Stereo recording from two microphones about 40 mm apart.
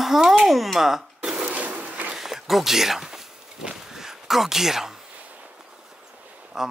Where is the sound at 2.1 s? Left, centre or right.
Centre.